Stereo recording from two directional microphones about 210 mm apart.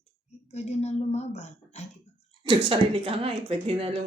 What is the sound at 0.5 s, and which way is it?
A woman's voice, 30° left (ahead or behind).